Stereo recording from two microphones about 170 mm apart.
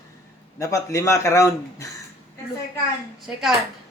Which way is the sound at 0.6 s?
20° left (ahead or behind).